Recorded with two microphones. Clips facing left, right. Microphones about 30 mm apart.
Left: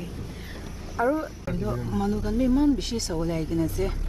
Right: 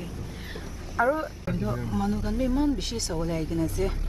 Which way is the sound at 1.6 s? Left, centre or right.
Centre.